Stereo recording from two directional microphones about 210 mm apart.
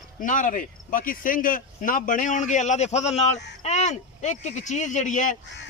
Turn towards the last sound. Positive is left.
turn(degrees=35)  # may be behind; listen again after turning